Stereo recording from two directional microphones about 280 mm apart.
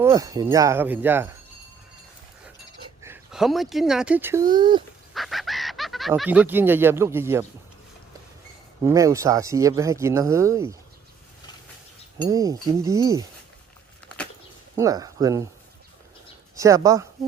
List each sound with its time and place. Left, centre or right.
0.0 s speech: centre
2.8 s speech: centre
5.1 s speech: centre
8.8 s speech: centre
12.3 s speech: centre
14.8 s speech: centre
16.6 s speech: centre